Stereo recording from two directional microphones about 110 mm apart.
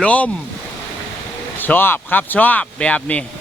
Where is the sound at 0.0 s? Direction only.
10° left (ahead or behind).